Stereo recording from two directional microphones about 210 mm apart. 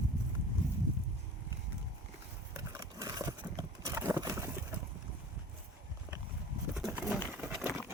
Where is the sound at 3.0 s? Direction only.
15° right (ahead or behind).